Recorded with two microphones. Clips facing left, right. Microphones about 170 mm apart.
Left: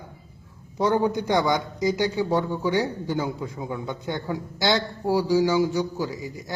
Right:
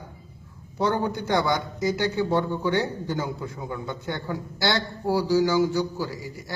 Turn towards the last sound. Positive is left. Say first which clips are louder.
# left 3 dB
turn(degrees=20)  # may be behind; listen again after turning